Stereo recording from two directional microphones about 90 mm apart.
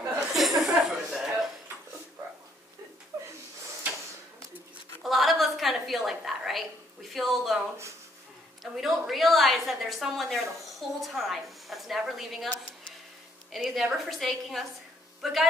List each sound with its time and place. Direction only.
0.0 s chuckle: 5° right (ahead or behind)
3.1 s snort: 35° right (ahead or behind)
5.0 s a sound: centre (ahead or behind)
8.7 s a woman's voice: 5° right (ahead or behind)
13.5 s a woman's voice: centre (ahead or behind)